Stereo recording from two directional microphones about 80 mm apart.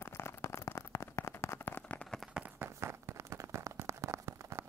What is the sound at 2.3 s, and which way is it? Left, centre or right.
Run, centre.